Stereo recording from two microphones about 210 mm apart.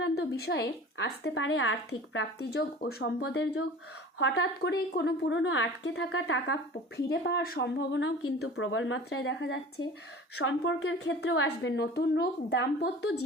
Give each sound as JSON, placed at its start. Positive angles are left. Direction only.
{"t": 0.3, "sound": "a woman's voice", "side_deg": 50}
{"t": 2.4, "sound": "a woman's voice", "side_deg": 50}
{"t": 10.3, "sound": "a woman's voice", "side_deg": 70}